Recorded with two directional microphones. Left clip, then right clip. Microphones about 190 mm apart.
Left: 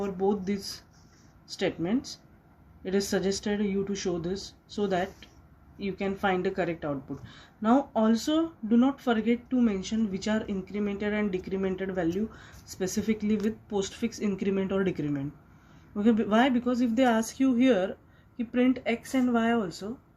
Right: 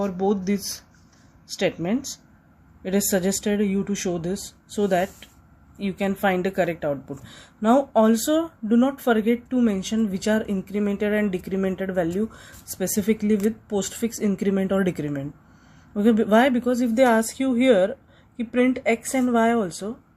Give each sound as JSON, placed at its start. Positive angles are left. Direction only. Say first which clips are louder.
{"t": 0.0, "sound": "a woman's voice", "louder": "right 5 dB", "side_deg": -55}